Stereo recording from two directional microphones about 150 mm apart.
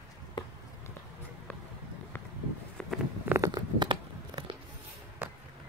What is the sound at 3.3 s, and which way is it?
Biting, 25° right (ahead or behind).